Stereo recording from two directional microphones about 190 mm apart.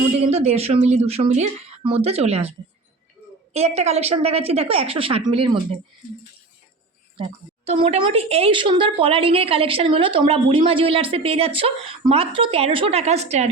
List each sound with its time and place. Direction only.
0.2 s a woman's voice: 35° right (ahead or behind)
7.2 s a woman's voice: 30° right (ahead or behind)